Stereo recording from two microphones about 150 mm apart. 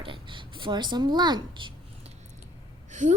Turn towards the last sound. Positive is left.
turn(degrees=-55)  # may be behind; listen again after turning